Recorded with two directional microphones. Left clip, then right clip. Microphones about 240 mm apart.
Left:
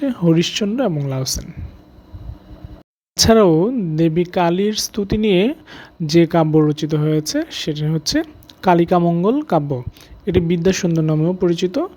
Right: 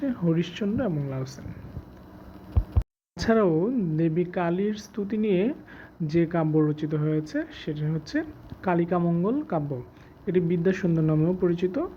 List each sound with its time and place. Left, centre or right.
0.0 s speech: left
3.2 s speech: left